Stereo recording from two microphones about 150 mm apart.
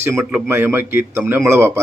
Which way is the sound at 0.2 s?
10° right (ahead or behind).